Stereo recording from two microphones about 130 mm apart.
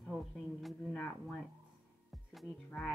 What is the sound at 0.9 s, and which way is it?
Speech, 10° left (ahead or behind).